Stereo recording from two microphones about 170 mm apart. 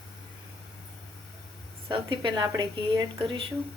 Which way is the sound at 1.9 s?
30° right (ahead or behind).